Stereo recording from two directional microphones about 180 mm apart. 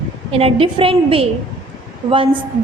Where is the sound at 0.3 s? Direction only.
30° right (ahead or behind).